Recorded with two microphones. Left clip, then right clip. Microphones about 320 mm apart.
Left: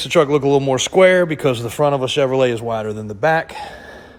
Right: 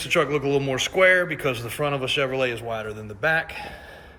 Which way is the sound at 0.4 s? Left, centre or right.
Left.